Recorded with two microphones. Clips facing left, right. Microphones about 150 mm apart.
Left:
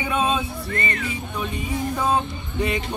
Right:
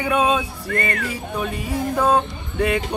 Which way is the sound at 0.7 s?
60° right (ahead or behind).